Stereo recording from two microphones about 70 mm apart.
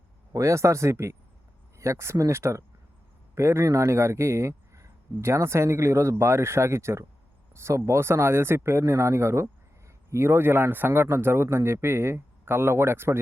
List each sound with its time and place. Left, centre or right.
0.3 s a man's voice: right